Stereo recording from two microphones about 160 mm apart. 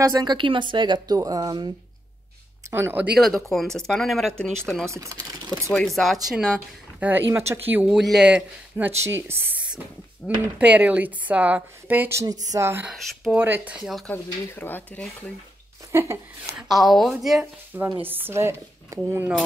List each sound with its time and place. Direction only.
0.0 s speech: 25° right (ahead or behind)
2.7 s speech: 15° right (ahead or behind)
3.2 s speech: centre (ahead or behind)
4.8 s speech: 20° right (ahead or behind)
6.2 s speech: 5° right (ahead or behind)
10.6 s speech: 10° right (ahead or behind)
12.9 s speech: centre (ahead or behind)
13.4 s speech: 10° right (ahead or behind)
13.8 s speech: centre (ahead or behind)
14.1 s speech: 15° left (ahead or behind)
15.9 s a woman's voice: 15° right (ahead or behind)
16.6 s speech: centre (ahead or behind)
18.0 s speech: 15° right (ahead or behind)